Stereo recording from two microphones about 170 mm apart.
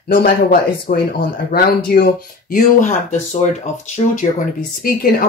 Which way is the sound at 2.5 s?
45° left (ahead or behind).